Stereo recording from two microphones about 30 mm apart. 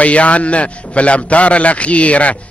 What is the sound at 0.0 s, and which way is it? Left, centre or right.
A man's voice, left.